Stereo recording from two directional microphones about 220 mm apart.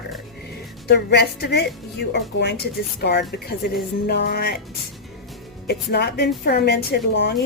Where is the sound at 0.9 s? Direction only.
45° left (ahead or behind).